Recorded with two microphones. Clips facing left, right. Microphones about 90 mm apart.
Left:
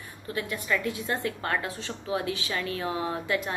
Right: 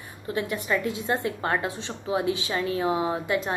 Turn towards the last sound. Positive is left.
turn(degrees=-20)  # may be behind; listen again after turning